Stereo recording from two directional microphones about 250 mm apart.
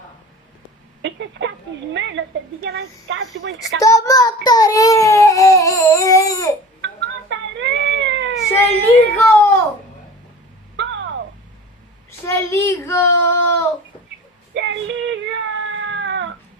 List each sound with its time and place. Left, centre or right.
1.0 s a woman's voice: right
3.8 s a child's voice: centre
7.3 s cat: right
8.5 s a child's voice: centre
10.8 s a sound: right
12.2 s a child's voice: centre
14.5 s cat: right